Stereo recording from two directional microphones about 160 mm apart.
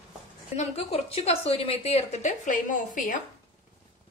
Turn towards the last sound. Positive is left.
turn(degrees=55)  # may be behind; listen again after turning